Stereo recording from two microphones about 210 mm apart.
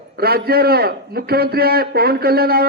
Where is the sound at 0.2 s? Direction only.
45° right (ahead or behind).